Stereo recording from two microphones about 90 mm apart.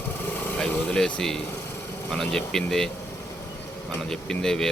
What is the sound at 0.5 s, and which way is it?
Speech, 10° left (ahead or behind).